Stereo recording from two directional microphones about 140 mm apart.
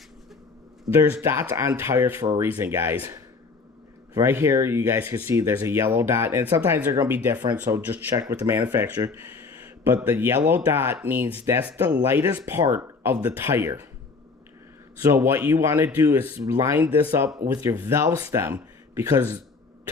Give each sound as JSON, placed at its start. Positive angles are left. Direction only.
{"t": 0.9, "sound": "speech", "side_deg": -15}
{"t": 15.0, "sound": "speech", "side_deg": -20}